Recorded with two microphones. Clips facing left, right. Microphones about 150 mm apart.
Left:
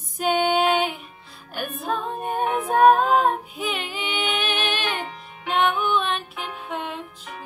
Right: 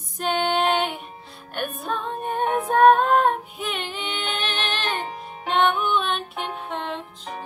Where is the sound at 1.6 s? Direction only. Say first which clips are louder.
Left 1 dB; 5° left (ahead or behind).